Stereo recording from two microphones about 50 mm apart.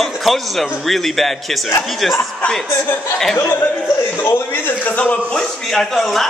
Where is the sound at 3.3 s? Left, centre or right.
Left.